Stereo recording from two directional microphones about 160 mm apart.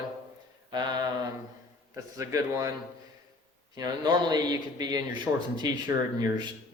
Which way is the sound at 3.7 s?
25° right (ahead or behind).